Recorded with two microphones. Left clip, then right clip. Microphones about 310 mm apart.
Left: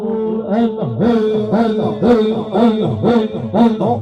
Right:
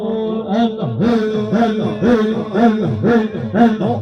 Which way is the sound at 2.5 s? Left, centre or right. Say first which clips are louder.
Even; left.